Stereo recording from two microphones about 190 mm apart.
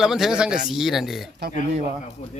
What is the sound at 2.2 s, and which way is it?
Speech, 30° left (ahead or behind).